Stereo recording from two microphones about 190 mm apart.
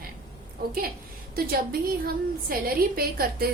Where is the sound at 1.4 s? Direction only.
50° right (ahead or behind).